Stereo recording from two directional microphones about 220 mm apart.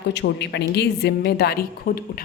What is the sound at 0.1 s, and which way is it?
A woman's voice, 50° left (ahead or behind).